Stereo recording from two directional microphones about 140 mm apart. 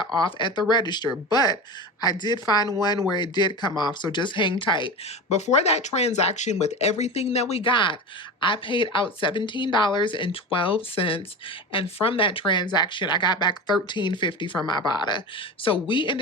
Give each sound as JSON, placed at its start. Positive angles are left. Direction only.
{"t": 0.0, "sound": "speech", "side_deg": 35}
{"t": 5.5, "sound": "speech", "side_deg": 50}
{"t": 7.5, "sound": "speech", "side_deg": 35}